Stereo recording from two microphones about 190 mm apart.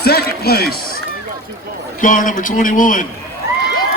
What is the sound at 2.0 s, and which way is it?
A man's voice, 45° left (ahead or behind).